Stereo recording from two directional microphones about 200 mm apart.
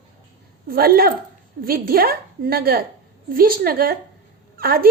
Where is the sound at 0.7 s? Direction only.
50° right (ahead or behind).